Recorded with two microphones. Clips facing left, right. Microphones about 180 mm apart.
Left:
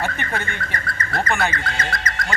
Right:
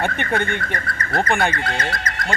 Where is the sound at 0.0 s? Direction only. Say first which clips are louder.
Right 4 dB; 55° right (ahead or behind).